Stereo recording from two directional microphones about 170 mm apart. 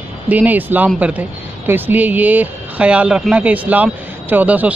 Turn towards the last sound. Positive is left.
turn(degrees=-10)  # may be behind; listen again after turning